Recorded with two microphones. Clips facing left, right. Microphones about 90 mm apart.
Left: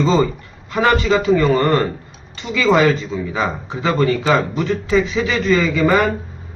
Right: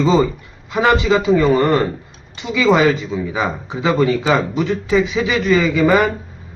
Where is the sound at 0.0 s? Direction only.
15° right (ahead or behind).